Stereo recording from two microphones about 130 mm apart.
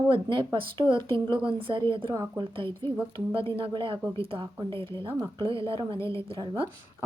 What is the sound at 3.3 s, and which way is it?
Speech, 45° right (ahead or behind).